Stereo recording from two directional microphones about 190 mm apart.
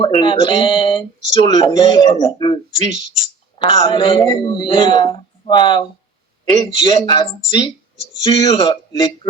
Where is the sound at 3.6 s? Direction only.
25° left (ahead or behind).